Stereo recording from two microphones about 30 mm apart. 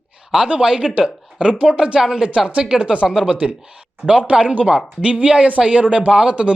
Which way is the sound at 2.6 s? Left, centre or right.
Right.